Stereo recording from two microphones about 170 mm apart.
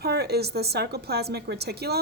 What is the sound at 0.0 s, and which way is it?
A woman's voice, 70° right (ahead or behind).